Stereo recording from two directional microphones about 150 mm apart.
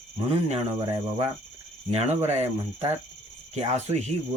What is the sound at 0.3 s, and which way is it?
Speech, 45° right (ahead or behind).